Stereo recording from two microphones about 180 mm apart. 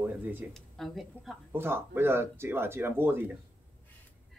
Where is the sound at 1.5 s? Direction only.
10° right (ahead or behind).